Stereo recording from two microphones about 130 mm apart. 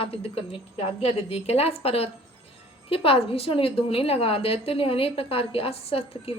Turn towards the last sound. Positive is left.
turn(degrees=50)  # may be behind; listen again after turning